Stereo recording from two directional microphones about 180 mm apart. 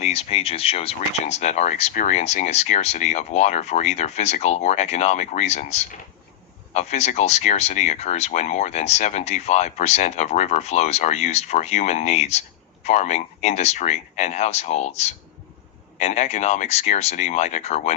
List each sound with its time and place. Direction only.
0.0 s speech: 35° left (ahead or behind)